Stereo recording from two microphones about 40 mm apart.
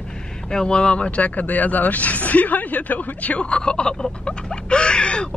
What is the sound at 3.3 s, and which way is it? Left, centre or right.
Speech, left.